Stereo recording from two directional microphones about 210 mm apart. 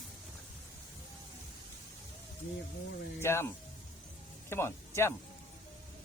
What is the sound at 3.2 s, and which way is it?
Speech, 10° left (ahead or behind).